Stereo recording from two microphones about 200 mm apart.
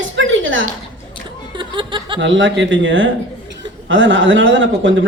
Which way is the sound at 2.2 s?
65° right (ahead or behind).